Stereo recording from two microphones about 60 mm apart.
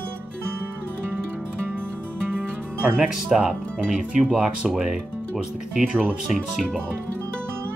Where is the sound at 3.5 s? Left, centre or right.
Centre.